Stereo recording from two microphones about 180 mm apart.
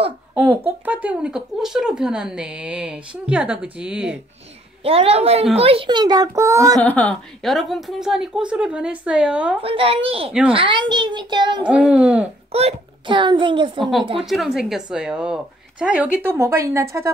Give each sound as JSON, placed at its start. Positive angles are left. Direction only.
{"t": 0.3, "sound": "speech", "side_deg": -10}
{"t": 4.8, "sound": "a child's voice", "side_deg": -30}
{"t": 6.8, "sound": "speech", "side_deg": 10}
{"t": 9.6, "sound": "a child's voice", "side_deg": -30}
{"t": 11.7, "sound": "speech", "side_deg": -5}
{"t": 12.5, "sound": "a child's voice", "side_deg": -30}
{"t": 14.3, "sound": "speech", "side_deg": 0}